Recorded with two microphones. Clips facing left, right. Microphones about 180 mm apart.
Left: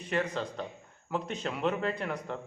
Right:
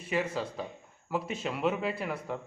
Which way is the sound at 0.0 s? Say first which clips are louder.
Even; 5° right (ahead or behind).